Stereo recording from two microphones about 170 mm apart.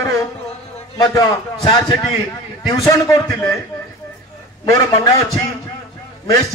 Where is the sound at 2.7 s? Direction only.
20° left (ahead or behind).